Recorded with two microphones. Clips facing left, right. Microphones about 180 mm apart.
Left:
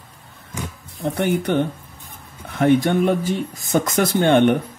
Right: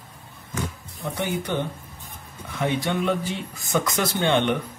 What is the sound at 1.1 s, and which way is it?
Speech, 60° left (ahead or behind).